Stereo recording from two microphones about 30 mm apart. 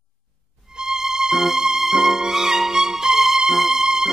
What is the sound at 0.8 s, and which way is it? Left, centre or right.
Music, centre.